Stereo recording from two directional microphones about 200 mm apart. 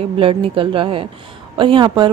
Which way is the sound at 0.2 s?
25° right (ahead or behind).